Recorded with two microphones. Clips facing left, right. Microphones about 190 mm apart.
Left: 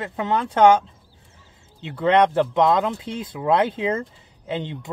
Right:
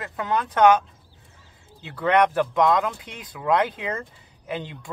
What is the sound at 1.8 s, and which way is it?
Speech, 25° left (ahead or behind).